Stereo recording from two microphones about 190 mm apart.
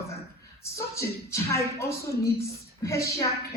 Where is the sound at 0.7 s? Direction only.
15° left (ahead or behind).